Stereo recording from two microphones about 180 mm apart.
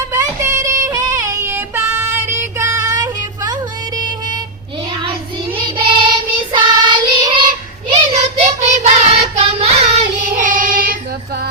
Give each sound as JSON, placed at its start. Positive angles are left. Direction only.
{"t": 0.1, "sound": "a sound", "side_deg": -15}
{"t": 5.5, "sound": "child singing", "side_deg": -25}
{"t": 7.9, "sound": "child singing", "side_deg": -40}